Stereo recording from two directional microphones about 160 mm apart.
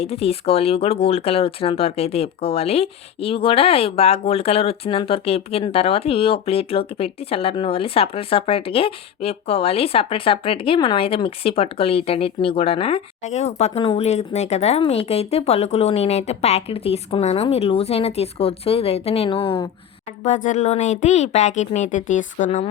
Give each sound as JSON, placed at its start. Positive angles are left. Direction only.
{"t": 0.0, "sound": "speech", "side_deg": 40}
{"t": 20.2, "sound": "speech", "side_deg": 50}